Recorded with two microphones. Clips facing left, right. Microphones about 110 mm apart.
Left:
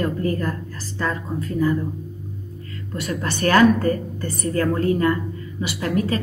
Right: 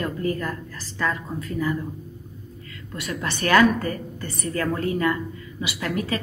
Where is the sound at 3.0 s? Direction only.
40° left (ahead or behind).